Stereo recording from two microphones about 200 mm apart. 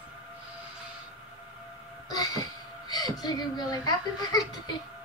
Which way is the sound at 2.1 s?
20° left (ahead or behind).